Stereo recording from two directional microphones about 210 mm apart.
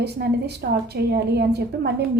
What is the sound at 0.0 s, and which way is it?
A woman's voice, 50° right (ahead or behind).